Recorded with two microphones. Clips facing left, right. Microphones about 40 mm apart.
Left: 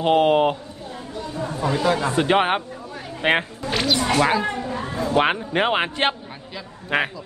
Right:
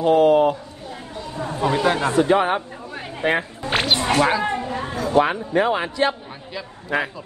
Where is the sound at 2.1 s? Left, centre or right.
Left.